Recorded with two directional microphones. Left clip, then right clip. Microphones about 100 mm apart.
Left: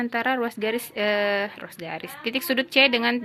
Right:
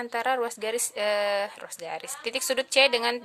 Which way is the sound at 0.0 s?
35° right (ahead or behind).